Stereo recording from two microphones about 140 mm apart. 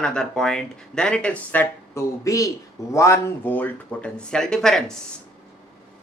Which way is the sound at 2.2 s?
25° left (ahead or behind).